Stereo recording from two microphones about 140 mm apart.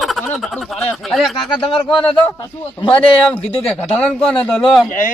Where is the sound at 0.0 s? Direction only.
Centre (ahead or behind).